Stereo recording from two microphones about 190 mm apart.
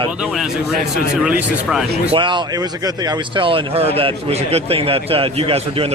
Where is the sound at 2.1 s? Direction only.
25° right (ahead or behind).